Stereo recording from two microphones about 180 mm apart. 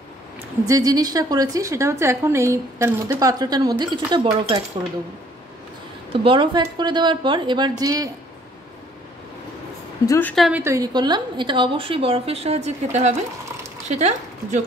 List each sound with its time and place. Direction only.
0.7 s a woman's voice: 20° right (ahead or behind)
6.2 s a woman's voice: 30° right (ahead or behind)
10.0 s a woman's voice: 15° left (ahead or behind)
10.3 s a woman's voice: centre (ahead or behind)
10.6 s a woman's voice: 20° right (ahead or behind); by 14.6 s 40° right (ahead or behind)